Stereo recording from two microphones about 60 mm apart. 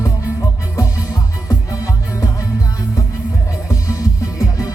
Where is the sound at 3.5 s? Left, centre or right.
Left.